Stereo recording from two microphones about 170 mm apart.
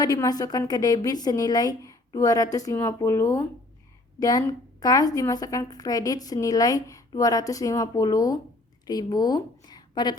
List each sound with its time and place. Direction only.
0.0 s a woman's voice: 20° left (ahead or behind)